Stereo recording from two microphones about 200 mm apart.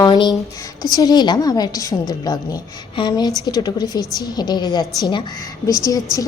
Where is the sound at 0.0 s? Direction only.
20° left (ahead or behind).